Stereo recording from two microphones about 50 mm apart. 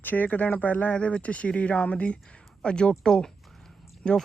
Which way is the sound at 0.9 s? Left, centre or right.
Left.